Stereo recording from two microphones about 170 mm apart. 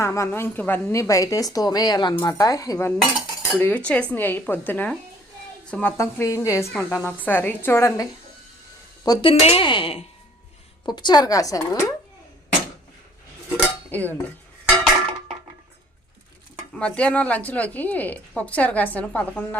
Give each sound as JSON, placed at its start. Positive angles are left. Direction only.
{"t": 0.0, "sound": "a woman's voice", "side_deg": 15}
{"t": 3.0, "sound": "cutlery", "side_deg": 0}
{"t": 3.6, "sound": "speech", "side_deg": 10}
{"t": 9.0, "sound": "a woman's voice", "side_deg": 35}
{"t": 13.9, "sound": "speech", "side_deg": 10}
{"t": 16.7, "sound": "speech", "side_deg": 5}